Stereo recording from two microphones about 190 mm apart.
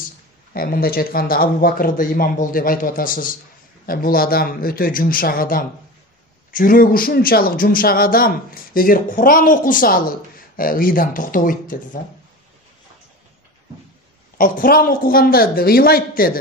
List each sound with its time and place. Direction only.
0.5 s speech: 50° left (ahead or behind)
14.4 s speech: 50° left (ahead or behind)